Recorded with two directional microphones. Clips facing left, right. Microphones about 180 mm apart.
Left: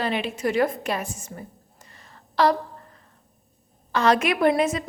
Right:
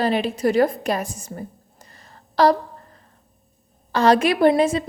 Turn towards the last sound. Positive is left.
turn(degrees=-30)  # may be behind; listen again after turning